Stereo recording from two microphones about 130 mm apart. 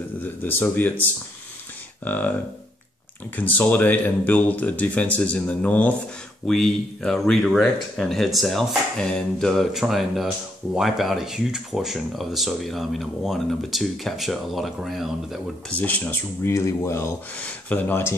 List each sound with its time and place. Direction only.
0.2 s speech: 15° left (ahead or behind)
2.0 s speech: 15° left (ahead or behind)
3.3 s speech: 10° left (ahead or behind)
15.7 s speech: 10° left (ahead or behind)
17.4 s speech: 10° left (ahead or behind)